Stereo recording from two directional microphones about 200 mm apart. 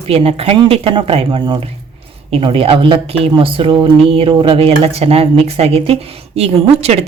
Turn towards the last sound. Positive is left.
turn(degrees=-30)  # may be behind; listen again after turning